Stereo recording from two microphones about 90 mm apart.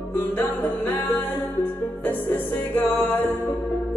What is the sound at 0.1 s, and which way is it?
Music, 25° left (ahead or behind).